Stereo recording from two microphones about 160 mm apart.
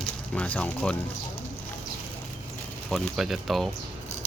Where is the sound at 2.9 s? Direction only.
Centre (ahead or behind).